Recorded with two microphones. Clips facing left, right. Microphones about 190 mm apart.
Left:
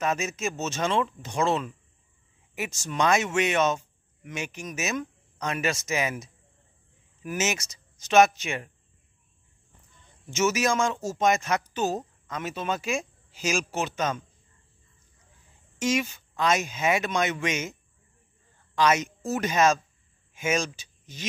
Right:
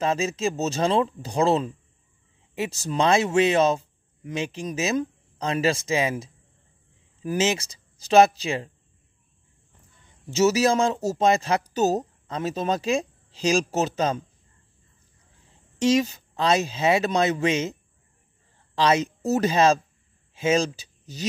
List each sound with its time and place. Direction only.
0.0 s speech: 30° right (ahead or behind)
10.2 s speech: 35° right (ahead or behind)
15.8 s speech: 35° right (ahead or behind)
18.8 s speech: 30° right (ahead or behind)